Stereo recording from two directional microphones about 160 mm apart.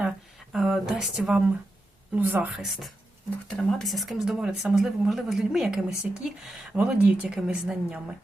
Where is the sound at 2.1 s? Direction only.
10° right (ahead or behind).